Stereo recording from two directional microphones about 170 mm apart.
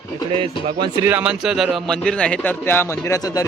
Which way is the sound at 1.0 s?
10° right (ahead or behind).